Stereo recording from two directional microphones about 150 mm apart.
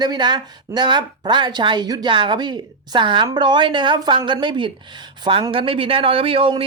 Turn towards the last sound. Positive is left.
turn(degrees=-35)  # may be behind; listen again after turning